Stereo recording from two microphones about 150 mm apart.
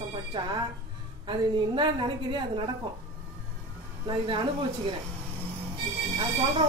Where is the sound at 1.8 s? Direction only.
35° right (ahead or behind).